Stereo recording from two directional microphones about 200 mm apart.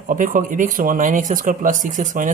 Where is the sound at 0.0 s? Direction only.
40° right (ahead or behind).